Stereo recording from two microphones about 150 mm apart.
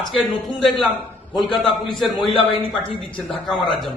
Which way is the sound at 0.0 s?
Centre (ahead or behind).